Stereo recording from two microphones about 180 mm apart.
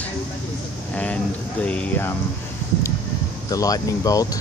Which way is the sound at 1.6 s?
5° left (ahead or behind).